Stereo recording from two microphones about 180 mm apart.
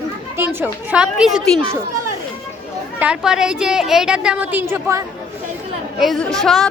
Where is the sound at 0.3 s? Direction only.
10° right (ahead or behind).